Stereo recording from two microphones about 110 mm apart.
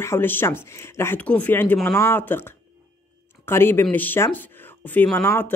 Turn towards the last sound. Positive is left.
turn(degrees=20)  # may be behind; listen again after turning